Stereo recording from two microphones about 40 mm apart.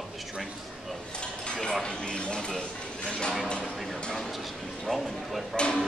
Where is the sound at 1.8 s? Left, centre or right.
Centre.